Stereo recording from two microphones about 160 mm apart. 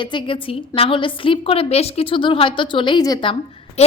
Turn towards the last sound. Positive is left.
turn(degrees=40)  # may be behind; listen again after turning